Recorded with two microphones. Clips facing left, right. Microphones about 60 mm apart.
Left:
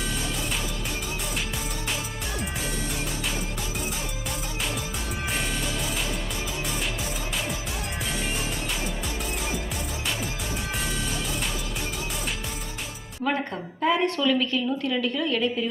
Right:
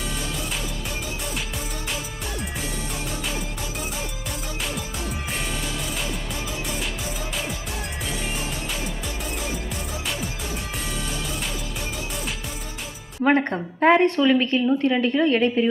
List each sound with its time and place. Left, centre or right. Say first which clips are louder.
13.2 s a woman's voice: right 7 dB; right
14.2 s a woman's voice: right 5 dB; right